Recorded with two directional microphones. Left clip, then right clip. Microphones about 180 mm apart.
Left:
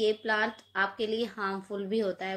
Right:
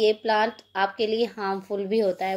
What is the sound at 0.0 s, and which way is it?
A woman's voice, 25° right (ahead or behind).